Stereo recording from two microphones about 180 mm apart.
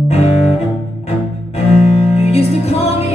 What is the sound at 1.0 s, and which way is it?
Cello, 35° left (ahead or behind).